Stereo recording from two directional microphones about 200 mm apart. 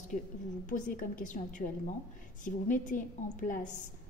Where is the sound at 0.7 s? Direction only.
40° left (ahead or behind).